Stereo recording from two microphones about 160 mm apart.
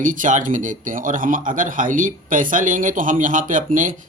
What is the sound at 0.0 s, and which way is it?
Speech, 55° right (ahead or behind).